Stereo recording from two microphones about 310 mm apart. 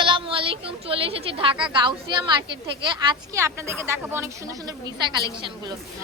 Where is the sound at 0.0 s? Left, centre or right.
Centre.